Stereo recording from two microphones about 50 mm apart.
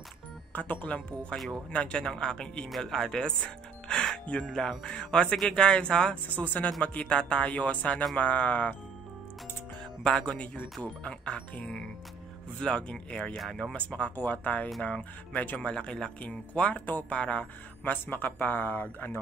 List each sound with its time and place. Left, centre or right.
0.5 s speech: left; by 3.3 s centre
3.9 s music: centre
4.5 s speech: centre
4.8 s speech: centre
6.3 s speech: left
10.0 s speech: centre
14.1 s speech: left
15.7 s speech: centre
16.2 s speech: left
17.8 s speech: left